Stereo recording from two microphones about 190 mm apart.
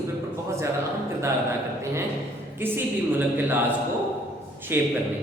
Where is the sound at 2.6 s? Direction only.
10° right (ahead or behind).